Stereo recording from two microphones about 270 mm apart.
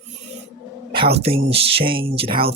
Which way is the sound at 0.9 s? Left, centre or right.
Right.